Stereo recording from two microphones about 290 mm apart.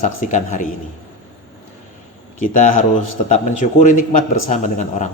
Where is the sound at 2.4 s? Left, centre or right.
Left.